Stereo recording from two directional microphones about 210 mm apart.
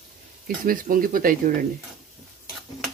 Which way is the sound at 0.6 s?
40° right (ahead or behind).